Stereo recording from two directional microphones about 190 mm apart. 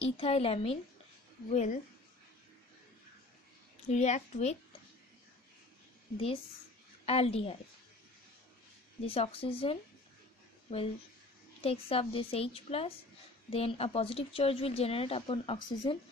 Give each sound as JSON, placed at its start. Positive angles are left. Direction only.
{"t": 0.0, "sound": "a woman's voice", "side_deg": 30}
{"t": 3.9, "sound": "a woman's voice", "side_deg": 40}
{"t": 6.1, "sound": "a woman's voice", "side_deg": 30}
{"t": 9.0, "sound": "a woman's voice", "side_deg": 30}
{"t": 11.6, "sound": "a woman's voice", "side_deg": 30}